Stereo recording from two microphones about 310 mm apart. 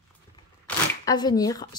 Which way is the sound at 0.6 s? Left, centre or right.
Centre.